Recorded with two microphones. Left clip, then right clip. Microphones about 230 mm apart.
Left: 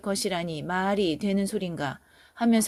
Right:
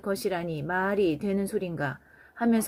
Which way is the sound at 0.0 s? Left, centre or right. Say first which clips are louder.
Even; left.